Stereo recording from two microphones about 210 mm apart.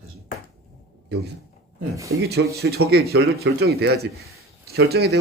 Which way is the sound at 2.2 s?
50° right (ahead or behind).